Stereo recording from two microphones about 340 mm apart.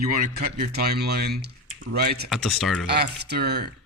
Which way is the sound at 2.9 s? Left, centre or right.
Right.